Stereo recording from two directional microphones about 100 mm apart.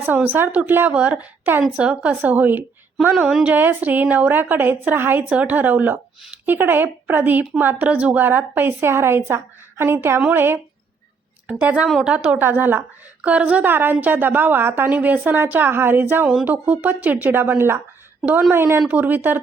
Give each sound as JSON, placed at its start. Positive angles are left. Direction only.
{"t": 0.0, "sound": "a woman's voice", "side_deg": -20}